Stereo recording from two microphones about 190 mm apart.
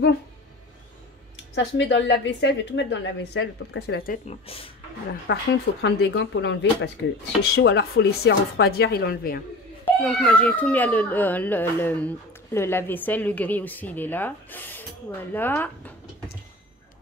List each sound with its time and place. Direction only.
1.5 s a woman's voice: 65° left (ahead or behind)
4.5 s speech: 30° left (ahead or behind)
5.2 s a woman's voice: 60° left (ahead or behind)
9.8 s a child's voice: 5° left (ahead or behind)